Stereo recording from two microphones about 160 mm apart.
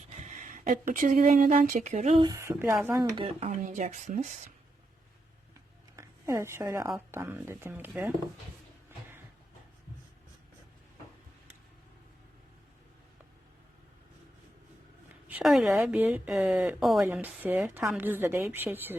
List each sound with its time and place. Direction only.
0.1 s speech: 50° right (ahead or behind)
2.2 s a woman's voice: 20° right (ahead or behind)
3.2 s speech: 35° right (ahead or behind)
3.6 s speech: 50° right (ahead or behind)
6.0 s a woman's voice: 20° right (ahead or behind)
15.1 s a woman's voice: 5° right (ahead or behind)